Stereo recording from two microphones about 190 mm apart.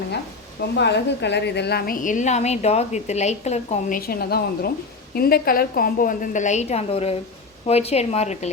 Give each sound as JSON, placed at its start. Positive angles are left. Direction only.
{"t": 0.8, "sound": "a woman's voice", "side_deg": 65}